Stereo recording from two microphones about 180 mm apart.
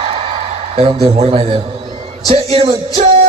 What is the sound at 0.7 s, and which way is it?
A man's voice, 35° right (ahead or behind).